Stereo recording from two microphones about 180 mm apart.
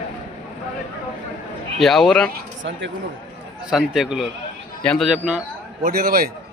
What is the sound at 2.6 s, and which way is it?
Speech, 80° right.